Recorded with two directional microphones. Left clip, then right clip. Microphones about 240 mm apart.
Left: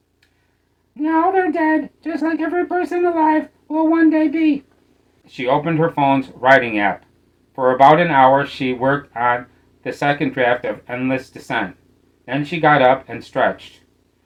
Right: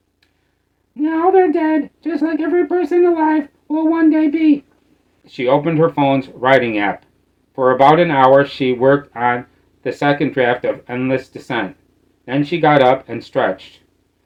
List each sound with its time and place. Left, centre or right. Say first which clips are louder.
0.9 s speech: right 3 dB; centre